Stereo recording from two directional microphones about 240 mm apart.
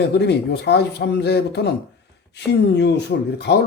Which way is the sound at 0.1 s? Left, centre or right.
Left.